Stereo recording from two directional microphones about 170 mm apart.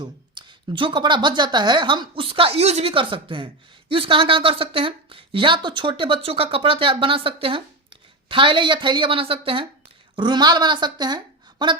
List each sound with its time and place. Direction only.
0.0 s a woman's voice: 30° right (ahead or behind)